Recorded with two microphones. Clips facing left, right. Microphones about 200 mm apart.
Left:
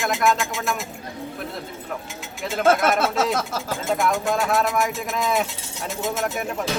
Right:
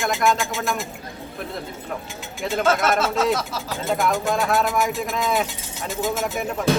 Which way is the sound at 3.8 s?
Centre (ahead or behind).